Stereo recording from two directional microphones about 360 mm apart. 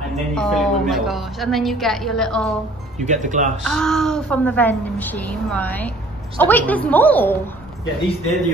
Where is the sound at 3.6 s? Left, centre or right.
Centre.